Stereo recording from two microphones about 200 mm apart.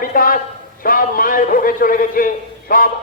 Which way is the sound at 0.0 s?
45° left (ahead or behind).